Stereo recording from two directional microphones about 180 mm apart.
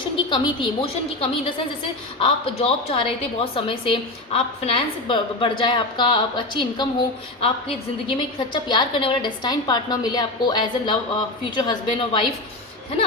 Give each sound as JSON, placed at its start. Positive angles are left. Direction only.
{"t": 0.3, "sound": "a woman's voice", "side_deg": 25}